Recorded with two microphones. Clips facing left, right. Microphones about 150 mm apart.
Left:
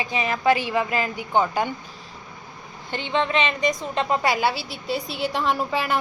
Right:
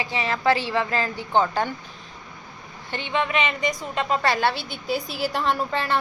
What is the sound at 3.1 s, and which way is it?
A woman's voice, 25° left (ahead or behind).